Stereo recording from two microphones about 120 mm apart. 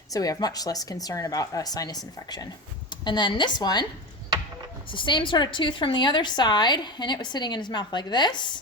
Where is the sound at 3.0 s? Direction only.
40° left (ahead or behind).